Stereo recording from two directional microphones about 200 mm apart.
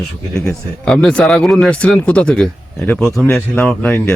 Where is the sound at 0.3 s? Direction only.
5° left (ahead or behind).